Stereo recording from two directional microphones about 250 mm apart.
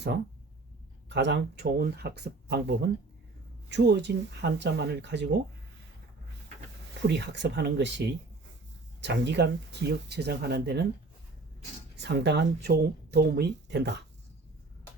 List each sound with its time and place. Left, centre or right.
1.1 s speech: right
7.1 s speech: right
11.9 s speech: right